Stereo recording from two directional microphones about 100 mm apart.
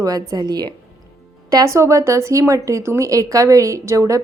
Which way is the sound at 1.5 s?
30° right (ahead or behind).